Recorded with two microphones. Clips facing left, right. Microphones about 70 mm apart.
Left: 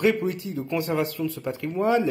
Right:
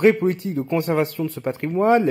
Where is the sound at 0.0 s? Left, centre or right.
Right.